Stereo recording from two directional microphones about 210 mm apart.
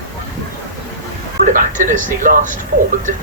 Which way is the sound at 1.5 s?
40° right (ahead or behind).